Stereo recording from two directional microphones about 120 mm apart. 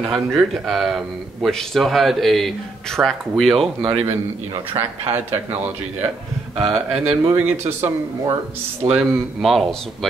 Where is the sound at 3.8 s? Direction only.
50° right (ahead or behind).